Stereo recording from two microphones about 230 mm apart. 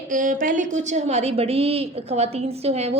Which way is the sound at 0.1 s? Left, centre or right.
Right.